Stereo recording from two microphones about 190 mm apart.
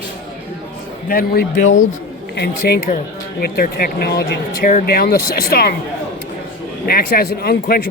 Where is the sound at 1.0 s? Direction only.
50° left (ahead or behind).